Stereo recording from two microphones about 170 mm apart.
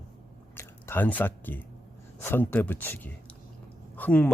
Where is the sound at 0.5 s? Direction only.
15° left (ahead or behind).